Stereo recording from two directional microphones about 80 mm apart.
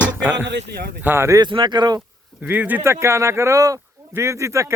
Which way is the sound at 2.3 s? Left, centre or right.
Right.